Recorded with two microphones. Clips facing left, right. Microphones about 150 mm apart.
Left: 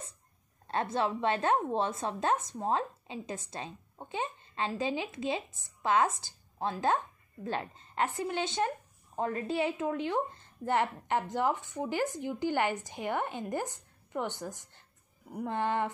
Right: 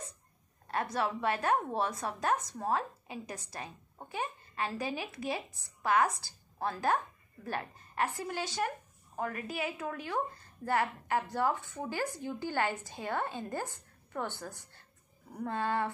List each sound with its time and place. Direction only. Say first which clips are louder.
0.7 s a woman's voice: left 2 dB; 25° left (ahead or behind)